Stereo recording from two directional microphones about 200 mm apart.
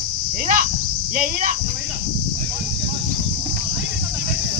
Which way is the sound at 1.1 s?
40° right (ahead or behind).